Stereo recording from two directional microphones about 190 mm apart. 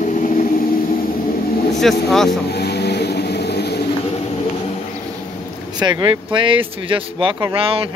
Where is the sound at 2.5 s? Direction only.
60° left (ahead or behind).